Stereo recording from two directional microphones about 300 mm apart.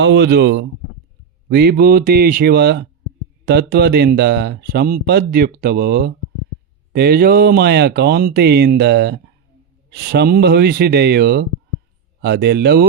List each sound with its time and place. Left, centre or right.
0.0 s speech: right